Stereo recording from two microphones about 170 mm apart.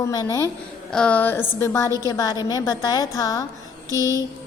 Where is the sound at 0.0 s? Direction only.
20° left (ahead or behind).